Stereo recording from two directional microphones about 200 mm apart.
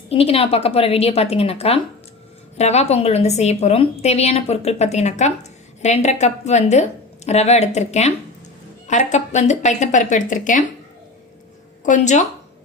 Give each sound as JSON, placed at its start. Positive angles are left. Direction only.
{"t": 0.1, "sound": "a woman's voice", "side_deg": 30}
{"t": 11.8, "sound": "speech", "side_deg": 40}